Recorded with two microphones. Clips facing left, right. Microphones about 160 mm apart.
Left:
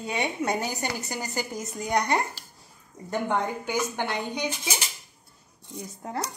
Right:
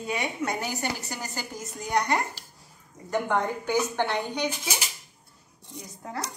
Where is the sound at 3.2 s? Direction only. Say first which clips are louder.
Left 1 dB; 15° left (ahead or behind).